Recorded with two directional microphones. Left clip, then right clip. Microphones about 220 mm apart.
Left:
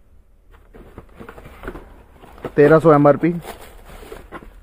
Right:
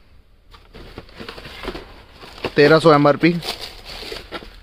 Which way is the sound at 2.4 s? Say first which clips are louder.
Even; 10° right (ahead or behind).